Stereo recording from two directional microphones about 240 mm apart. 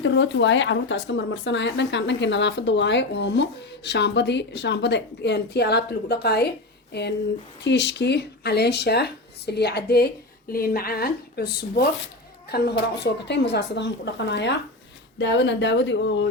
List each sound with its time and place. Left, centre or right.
0.0 s speech: left